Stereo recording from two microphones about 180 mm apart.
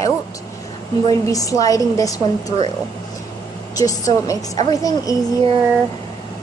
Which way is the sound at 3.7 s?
20° left (ahead or behind).